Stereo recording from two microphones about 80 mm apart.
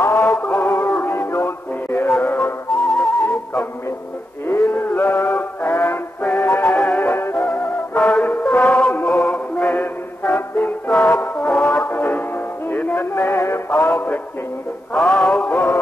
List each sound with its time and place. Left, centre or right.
0.0 s synthetic singing: left
1.0 s music: left
2.0 s music: centre
4.5 s music: left
6.6 s music: centre
13.1 s synthetic singing: left
13.7 s music: left
15.0 s music: centre